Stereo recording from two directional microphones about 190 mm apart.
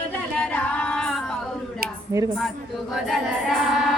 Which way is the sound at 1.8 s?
55° right (ahead or behind).